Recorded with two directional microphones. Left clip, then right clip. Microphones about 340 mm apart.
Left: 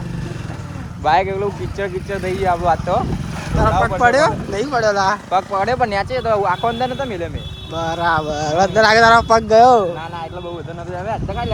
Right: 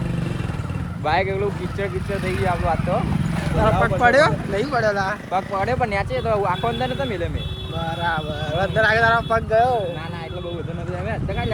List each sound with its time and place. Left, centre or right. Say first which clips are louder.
1.0 s speech: left 5 dB; left
3.6 s speech: left 3 dB; centre
5.3 s speech: left 5 dB; left
11.1 s speech: left 4 dB; centre